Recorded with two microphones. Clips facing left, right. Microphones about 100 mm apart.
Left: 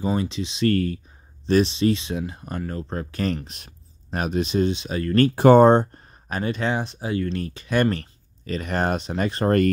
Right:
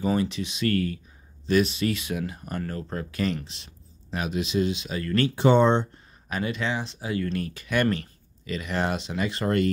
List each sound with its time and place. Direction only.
0.0 s speech: 20° left (ahead or behind); by 9.7 s 40° left (ahead or behind)